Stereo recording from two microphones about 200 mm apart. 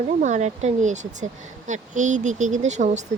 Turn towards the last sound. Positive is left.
turn(degrees=-35)  # may be behind; listen again after turning